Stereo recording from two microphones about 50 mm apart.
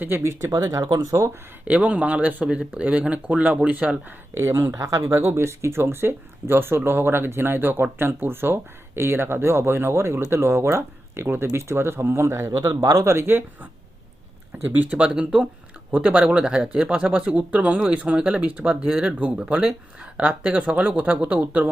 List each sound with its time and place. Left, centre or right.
0.2 s speech: right
1.6 s speech: right
4.4 s speech: right
13.1 s speech: right
14.7 s speech: right
14.9 s speech: right
16.0 s speech: right